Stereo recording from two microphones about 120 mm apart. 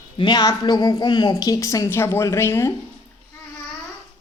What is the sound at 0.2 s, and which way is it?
A woman's voice, 35° left (ahead or behind).